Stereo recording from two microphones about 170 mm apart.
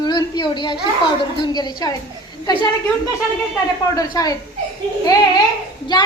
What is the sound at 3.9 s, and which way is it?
Speech, 20° left (ahead or behind).